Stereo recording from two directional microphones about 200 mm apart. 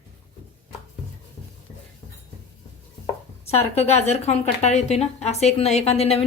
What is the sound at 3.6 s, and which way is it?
A woman's voice, 30° left (ahead or behind).